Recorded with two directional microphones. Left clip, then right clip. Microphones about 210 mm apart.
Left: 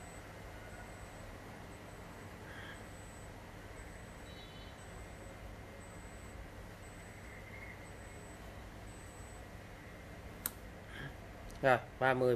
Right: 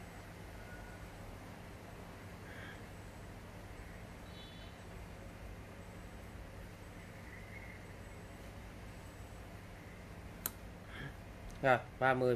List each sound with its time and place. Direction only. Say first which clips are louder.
11.6 s speech: left 1 dB; 5° left (ahead or behind)